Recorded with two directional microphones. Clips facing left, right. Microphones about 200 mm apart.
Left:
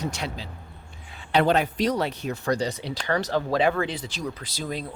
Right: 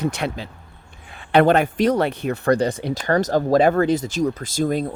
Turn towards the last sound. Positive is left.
turn(degrees=-50)  # may be behind; listen again after turning